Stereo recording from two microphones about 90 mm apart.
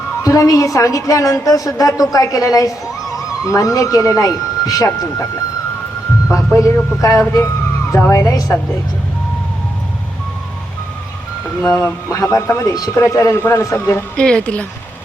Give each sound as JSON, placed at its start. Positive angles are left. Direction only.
{"t": 0.2, "sound": "a man's voice", "side_deg": 40}
{"t": 6.6, "sound": "a man's voice", "side_deg": 35}
{"t": 11.8, "sound": "a man's voice", "side_deg": 35}
{"t": 14.2, "sound": "speech", "side_deg": 10}